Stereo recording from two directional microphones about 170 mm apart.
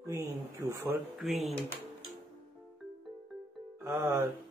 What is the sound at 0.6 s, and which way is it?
Speech, 15° right (ahead or behind).